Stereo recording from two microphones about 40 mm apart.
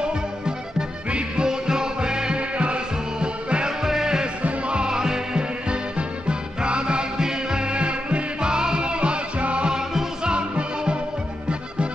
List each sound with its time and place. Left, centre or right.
0.7 s music: right
3.8 s music: centre
4.4 s music: right